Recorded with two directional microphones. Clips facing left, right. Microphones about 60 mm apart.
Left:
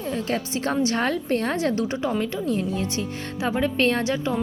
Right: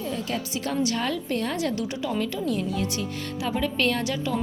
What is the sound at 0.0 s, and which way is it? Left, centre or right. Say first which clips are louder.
A woman's voice: left 3 dB; left.